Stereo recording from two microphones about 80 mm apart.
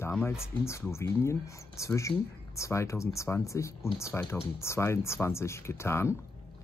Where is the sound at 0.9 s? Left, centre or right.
Left.